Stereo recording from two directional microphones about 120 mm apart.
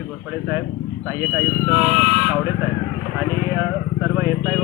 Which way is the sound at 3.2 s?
20° right (ahead or behind).